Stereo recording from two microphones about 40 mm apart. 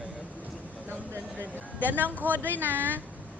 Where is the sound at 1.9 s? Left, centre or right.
Right.